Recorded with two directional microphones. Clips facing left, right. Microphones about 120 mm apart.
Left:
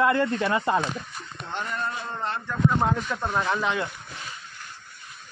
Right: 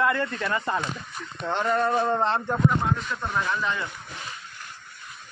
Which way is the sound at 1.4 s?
90° right.